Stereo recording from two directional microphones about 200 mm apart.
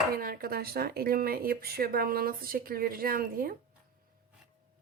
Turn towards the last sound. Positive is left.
turn(degrees=-45)  # may be behind; listen again after turning